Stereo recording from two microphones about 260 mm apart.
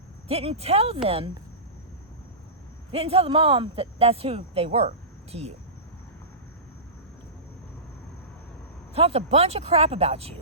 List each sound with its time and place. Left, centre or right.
0.3 s speech: right
2.9 s speech: right
9.0 s speech: right